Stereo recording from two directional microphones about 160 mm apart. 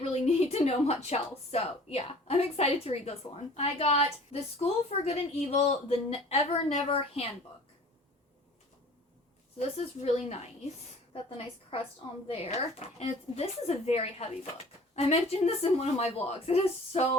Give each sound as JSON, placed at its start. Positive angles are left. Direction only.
{"t": 0.0, "sound": "a woman's voice", "side_deg": 40}
{"t": 9.6, "sound": "a woman's voice", "side_deg": 40}